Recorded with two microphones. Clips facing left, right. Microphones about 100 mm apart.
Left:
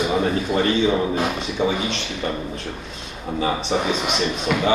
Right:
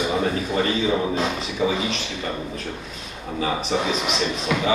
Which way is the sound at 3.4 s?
25° left (ahead or behind).